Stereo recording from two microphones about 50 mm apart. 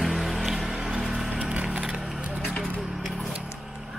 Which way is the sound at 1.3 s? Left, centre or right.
Right.